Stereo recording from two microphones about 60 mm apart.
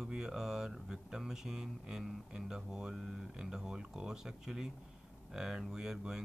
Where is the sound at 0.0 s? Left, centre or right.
Centre.